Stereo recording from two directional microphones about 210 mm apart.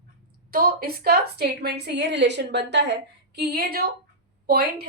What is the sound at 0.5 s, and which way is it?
A woman's voice, 45° right (ahead or behind).